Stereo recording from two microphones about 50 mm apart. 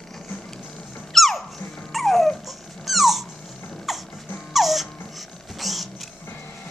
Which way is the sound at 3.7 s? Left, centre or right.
Centre.